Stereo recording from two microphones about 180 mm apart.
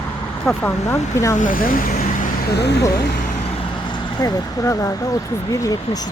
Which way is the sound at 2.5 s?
65° left (ahead or behind).